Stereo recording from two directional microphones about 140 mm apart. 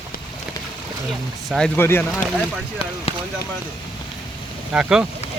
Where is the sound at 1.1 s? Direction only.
5° left (ahead or behind).